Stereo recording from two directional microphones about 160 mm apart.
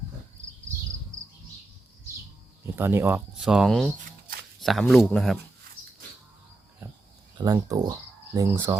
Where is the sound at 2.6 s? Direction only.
15° right (ahead or behind).